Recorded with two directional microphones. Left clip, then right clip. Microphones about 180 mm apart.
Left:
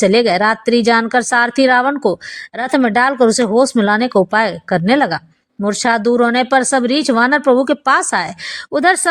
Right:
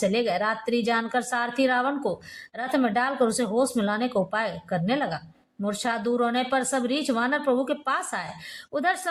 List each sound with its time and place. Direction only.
0.0 s speech: 45° left (ahead or behind)